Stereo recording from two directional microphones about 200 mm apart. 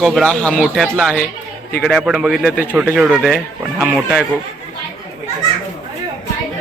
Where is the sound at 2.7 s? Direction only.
5° right (ahead or behind).